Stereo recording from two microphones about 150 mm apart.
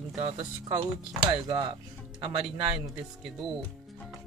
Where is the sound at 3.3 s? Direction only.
Centre (ahead or behind).